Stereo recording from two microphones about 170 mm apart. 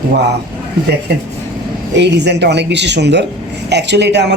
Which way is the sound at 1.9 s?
90° right.